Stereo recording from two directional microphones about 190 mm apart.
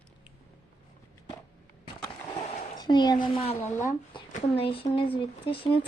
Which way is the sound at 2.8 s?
25° left (ahead or behind).